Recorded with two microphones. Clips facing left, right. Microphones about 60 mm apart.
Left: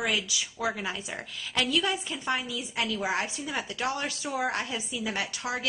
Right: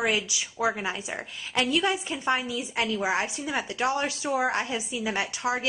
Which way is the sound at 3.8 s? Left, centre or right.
Right.